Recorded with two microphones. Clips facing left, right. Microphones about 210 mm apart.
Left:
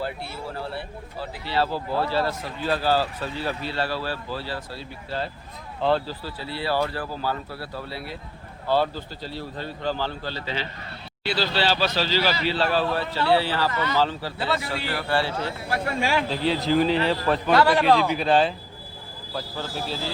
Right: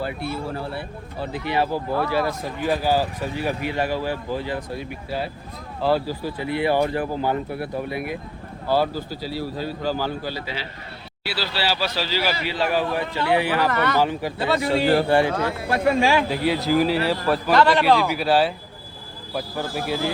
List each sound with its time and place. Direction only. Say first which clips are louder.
0.0 s speech: right 4 dB; 15° right (ahead or behind)
13.7 s speech: right 4 dB; 65° right (ahead or behind)
14.0 s a man's voice: right 3 dB; 15° right (ahead or behind)
15.3 s speech: right 5 dB; 85° right
16.3 s speech: right 2 dB; 10° right (ahead or behind)
17.5 s a man's voice: right 1 dB; 5° left (ahead or behind)
17.8 s speech: right 1 dB; 10° right (ahead or behind)